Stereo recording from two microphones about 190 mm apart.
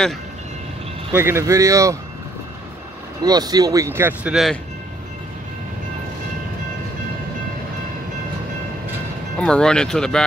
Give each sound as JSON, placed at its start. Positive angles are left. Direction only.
{"t": 1.1, "sound": "speech", "side_deg": -15}
{"t": 3.3, "sound": "speech", "side_deg": -20}
{"t": 9.4, "sound": "speech", "side_deg": 5}